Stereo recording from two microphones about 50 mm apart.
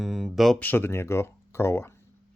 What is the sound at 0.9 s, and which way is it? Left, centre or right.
Speech, left.